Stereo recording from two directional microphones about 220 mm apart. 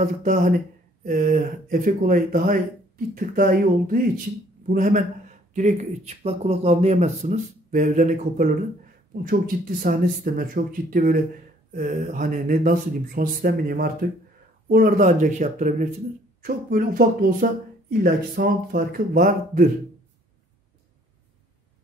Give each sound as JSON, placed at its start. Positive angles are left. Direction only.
{"t": 0.0, "sound": "speech", "side_deg": -35}